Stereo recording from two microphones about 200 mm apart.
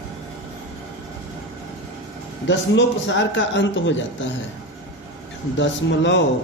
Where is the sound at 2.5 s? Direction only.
65° left (ahead or behind).